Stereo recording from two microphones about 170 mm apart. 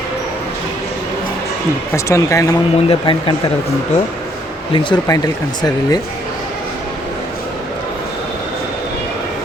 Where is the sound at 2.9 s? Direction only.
30° left (ahead or behind).